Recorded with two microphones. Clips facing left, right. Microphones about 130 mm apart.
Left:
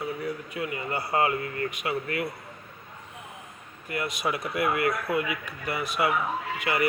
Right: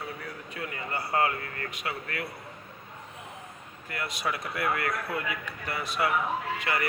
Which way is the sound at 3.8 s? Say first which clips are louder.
Left 3 dB; 15° left (ahead or behind).